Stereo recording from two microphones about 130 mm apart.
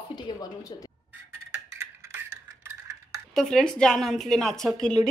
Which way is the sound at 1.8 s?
20° right (ahead or behind).